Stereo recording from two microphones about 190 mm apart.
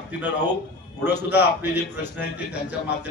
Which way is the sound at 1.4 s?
60° left (ahead or behind).